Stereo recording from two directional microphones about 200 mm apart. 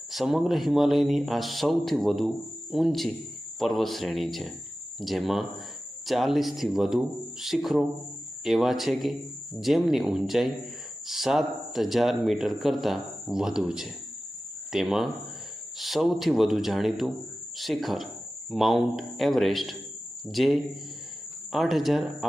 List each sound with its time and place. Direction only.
0.1 s speech: centre (ahead or behind)